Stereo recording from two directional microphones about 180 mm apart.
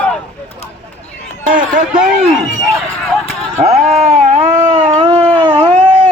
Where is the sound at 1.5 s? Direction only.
45° right (ahead or behind).